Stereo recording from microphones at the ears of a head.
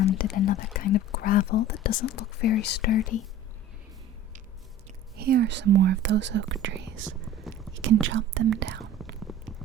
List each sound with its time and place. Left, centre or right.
0.0 s speech: left
5.1 s speech: right